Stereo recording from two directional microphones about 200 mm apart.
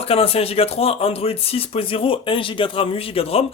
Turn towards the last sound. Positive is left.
turn(degrees=30)  # may be behind; listen again after turning